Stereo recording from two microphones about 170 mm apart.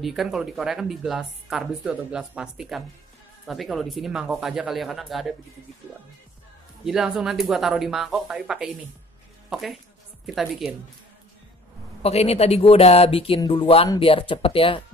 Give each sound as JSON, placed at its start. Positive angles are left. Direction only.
{"t": 0.0, "sound": "speech", "side_deg": 0}
{"t": 6.8, "sound": "speech", "side_deg": -5}
{"t": 12.0, "sound": "speech", "side_deg": 35}